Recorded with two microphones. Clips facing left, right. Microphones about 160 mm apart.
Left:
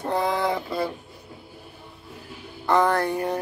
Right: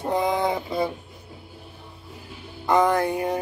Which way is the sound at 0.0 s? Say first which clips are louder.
Right 1 dB; 15° right (ahead or behind).